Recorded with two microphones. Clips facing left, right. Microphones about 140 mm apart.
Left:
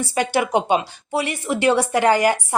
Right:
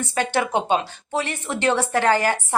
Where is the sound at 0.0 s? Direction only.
10° left (ahead or behind).